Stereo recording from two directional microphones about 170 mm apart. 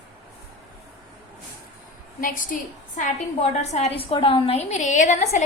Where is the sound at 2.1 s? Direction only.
55° left (ahead or behind).